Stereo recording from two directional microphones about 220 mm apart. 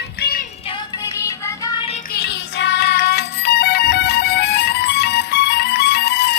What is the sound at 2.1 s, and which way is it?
Music, 50° left (ahead or behind).